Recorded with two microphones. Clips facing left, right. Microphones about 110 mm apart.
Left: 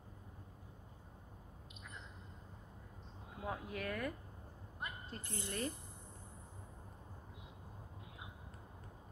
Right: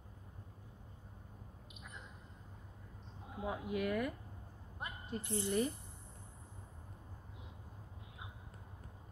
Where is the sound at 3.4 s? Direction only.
15° right (ahead or behind).